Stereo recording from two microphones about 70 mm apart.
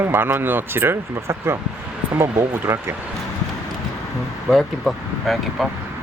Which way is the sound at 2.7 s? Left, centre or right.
Right.